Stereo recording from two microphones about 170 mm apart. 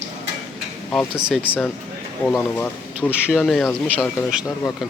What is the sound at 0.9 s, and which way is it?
Speech, 5° right (ahead or behind).